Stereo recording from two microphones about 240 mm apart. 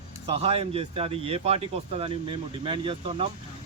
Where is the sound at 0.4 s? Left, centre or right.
Right.